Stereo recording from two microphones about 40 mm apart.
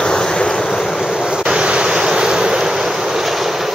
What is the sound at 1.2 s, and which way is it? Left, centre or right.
Waves, centre.